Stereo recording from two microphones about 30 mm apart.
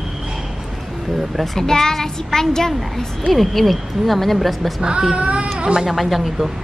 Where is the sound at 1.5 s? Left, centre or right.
Centre.